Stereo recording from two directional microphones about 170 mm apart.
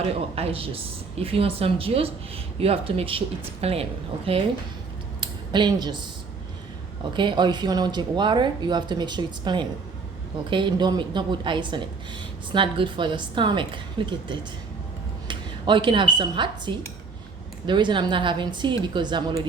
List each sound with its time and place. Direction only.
0.3 s speech: 35° right (ahead or behind)
5.2 s a sound: 25° right (ahead or behind)
7.1 s speech: 30° right (ahead or behind)
15.3 s speech: 30° right (ahead or behind)